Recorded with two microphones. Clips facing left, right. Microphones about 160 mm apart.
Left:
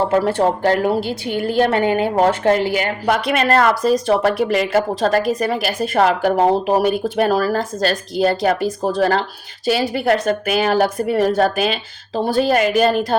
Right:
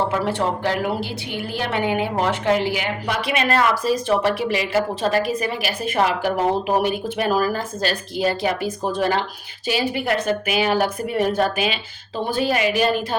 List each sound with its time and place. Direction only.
0.1 s a woman's voice: 50° left (ahead or behind)